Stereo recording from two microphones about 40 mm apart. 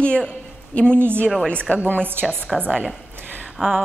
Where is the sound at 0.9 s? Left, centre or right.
Right.